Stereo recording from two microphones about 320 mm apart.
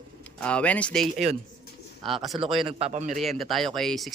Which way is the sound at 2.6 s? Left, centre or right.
Centre.